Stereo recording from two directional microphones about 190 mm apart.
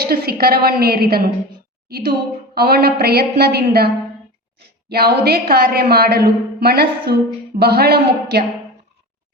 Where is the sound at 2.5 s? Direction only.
55° right (ahead or behind).